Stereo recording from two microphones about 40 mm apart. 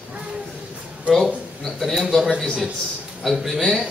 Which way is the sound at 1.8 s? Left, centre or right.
Centre.